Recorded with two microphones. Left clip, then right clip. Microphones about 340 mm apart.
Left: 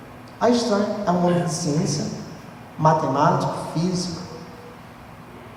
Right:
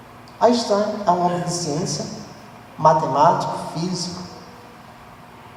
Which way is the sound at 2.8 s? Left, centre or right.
Right.